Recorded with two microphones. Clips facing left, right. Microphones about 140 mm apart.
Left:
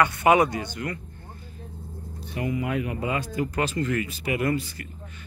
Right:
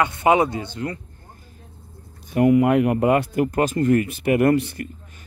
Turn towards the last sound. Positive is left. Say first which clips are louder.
# right 8 dB
turn(degrees=-60)  # may be behind; listen again after turning